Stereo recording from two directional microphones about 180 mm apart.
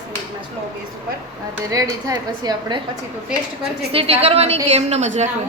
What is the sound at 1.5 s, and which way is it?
Speech, 20° right (ahead or behind).